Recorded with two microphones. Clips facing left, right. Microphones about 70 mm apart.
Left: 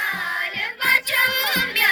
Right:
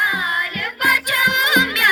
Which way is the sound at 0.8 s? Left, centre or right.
Right.